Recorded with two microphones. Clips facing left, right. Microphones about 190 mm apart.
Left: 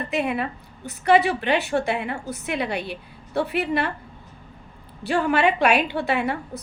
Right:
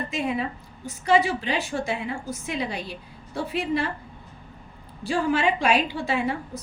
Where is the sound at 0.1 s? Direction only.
65° left (ahead or behind).